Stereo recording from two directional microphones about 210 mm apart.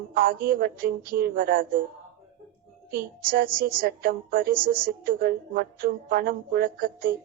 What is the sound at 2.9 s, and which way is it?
A woman's voice, 40° right (ahead or behind).